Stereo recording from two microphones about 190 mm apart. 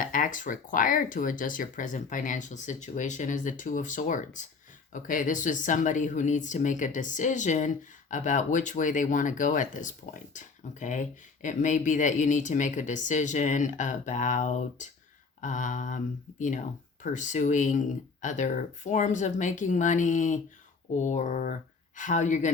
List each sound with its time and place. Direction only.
0.0 s speech: 45° left (ahead or behind)